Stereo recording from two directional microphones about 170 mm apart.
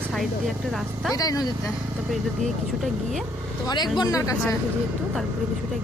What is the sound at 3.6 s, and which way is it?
Speech, 25° left (ahead or behind).